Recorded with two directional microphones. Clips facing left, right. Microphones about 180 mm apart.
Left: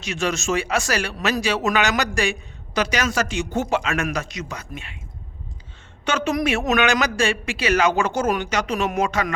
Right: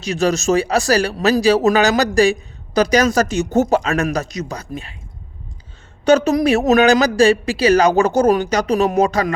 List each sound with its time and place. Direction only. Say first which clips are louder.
0.0 s speech: right 7 dB; 35° right (ahead or behind)
6.1 s speech: right 9 dB; 40° right (ahead or behind)